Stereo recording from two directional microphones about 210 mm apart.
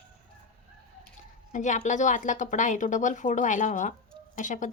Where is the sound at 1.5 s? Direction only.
35° left (ahead or behind).